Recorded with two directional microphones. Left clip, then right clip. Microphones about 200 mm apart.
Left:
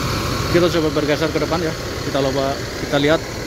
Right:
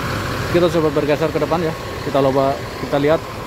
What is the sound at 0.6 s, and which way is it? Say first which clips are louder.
Speech: right 1 dB; 15° right (ahead or behind).